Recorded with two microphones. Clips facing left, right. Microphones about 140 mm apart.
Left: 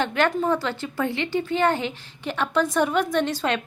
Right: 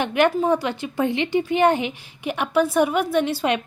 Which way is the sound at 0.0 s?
15° right (ahead or behind).